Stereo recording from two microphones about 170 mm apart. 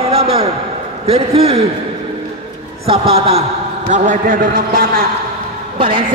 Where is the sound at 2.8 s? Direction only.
35° right (ahead or behind); by 5.0 s 60° right (ahead or behind).